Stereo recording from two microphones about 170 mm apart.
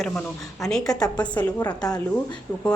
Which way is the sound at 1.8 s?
25° left (ahead or behind).